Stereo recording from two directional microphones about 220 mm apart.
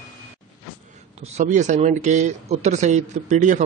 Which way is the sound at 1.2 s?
35° right (ahead or behind).